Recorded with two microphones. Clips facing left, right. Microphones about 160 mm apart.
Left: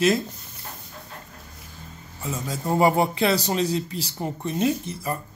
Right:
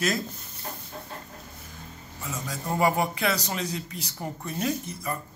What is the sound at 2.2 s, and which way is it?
Speech, 25° left (ahead or behind).